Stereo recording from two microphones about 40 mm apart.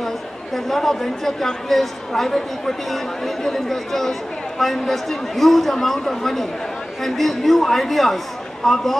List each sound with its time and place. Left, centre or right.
0.7 s a man's voice: centre